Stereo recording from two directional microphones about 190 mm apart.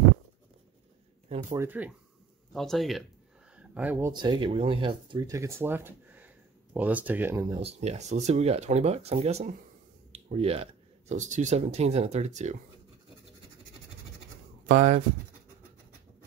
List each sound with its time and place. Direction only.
1.5 s speech: 10° right (ahead or behind)
4.1 s speech: 25° right (ahead or behind)
7.6 s speech: 35° right (ahead or behind)
14.7 s speech: 40° right (ahead or behind)